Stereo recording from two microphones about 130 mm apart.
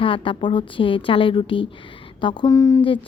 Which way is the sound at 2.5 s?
25° left (ahead or behind).